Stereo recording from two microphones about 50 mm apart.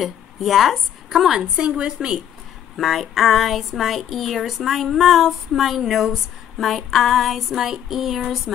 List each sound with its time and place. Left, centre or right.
0.0 s a woman's voice: centre
1.4 s a woman's voice: centre
2.8 s speech: centre